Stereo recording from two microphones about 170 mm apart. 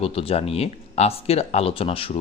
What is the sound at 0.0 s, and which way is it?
Speech, 35° left (ahead or behind).